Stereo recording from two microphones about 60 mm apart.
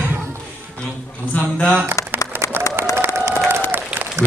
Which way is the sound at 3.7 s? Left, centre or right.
Right.